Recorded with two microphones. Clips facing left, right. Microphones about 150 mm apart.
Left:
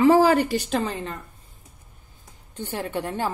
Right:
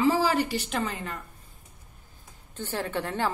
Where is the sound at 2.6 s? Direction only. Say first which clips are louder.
Left 2 dB; 15° left (ahead or behind).